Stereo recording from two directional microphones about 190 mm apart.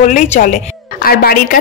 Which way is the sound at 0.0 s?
45° left (ahead or behind).